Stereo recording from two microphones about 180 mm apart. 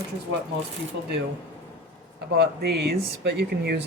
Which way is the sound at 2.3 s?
60° right (ahead or behind).